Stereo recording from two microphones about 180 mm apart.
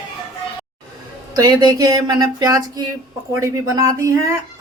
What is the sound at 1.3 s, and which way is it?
Speech, 20° right (ahead or behind).